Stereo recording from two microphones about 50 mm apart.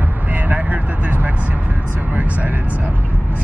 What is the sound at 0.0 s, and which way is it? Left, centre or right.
Vehicle, right.